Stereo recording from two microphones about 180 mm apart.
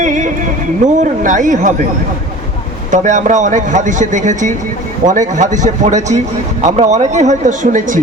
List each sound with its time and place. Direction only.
0.0 s music: 45° right (ahead or behind)
0.9 s a man's voice: 45° right (ahead or behind)
2.9 s a man's voice: 45° right (ahead or behind)